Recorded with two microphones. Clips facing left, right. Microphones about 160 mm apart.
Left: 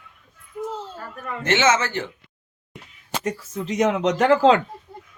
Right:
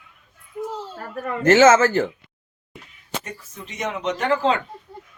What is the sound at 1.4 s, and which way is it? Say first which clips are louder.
Speech: right 7 dB; 45° right (ahead or behind).